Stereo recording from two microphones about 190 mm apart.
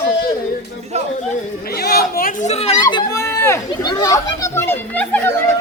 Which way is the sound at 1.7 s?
55° left (ahead or behind).